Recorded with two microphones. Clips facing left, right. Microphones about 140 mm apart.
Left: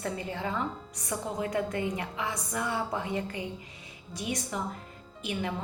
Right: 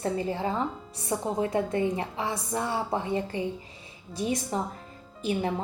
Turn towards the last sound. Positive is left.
turn(degrees=-35)  # may be behind; listen again after turning